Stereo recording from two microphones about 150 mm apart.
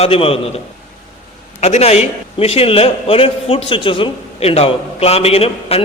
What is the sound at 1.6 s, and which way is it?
A man's voice, 45° left (ahead or behind).